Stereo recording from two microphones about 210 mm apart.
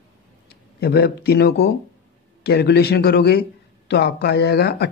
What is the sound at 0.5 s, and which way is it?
Speech, 50° left (ahead or behind).